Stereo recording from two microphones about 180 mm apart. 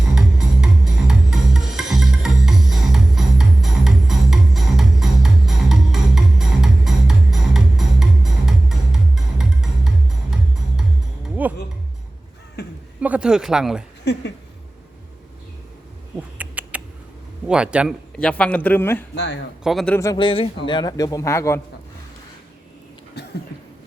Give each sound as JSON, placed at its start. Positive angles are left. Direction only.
{"t": 0.1, "sound": "music", "side_deg": -5}
{"t": 11.4, "sound": "a sound", "side_deg": -10}
{"t": 12.6, "sound": "a sound", "side_deg": 65}
{"t": 13.0, "sound": "speech", "side_deg": -5}
{"t": 14.0, "sound": "speech", "side_deg": 70}
{"t": 16.1, "sound": "rodents", "side_deg": -10}
{"t": 17.5, "sound": "speech", "side_deg": -5}
{"t": 18.2, "sound": "speech", "side_deg": 5}
{"t": 19.1, "sound": "speech", "side_deg": 70}
{"t": 19.6, "sound": "speech", "side_deg": 0}
{"t": 20.0, "sound": "a man's voice", "side_deg": 20}
{"t": 23.2, "sound": "a sound", "side_deg": 70}